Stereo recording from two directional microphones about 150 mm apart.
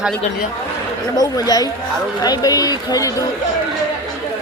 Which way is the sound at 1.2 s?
25° left (ahead or behind).